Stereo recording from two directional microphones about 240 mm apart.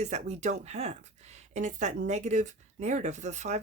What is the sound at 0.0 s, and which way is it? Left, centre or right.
Speech, right.